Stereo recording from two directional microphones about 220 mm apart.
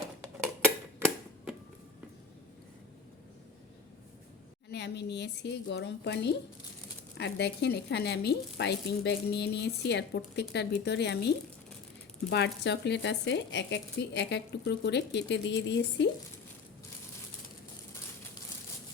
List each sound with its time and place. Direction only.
4.7 s speech: 50° left (ahead or behind)